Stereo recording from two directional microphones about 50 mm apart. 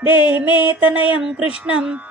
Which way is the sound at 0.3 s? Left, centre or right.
Right.